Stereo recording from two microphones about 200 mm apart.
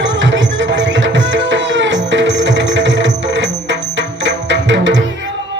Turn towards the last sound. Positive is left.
turn(degrees=-65)  # may be behind; listen again after turning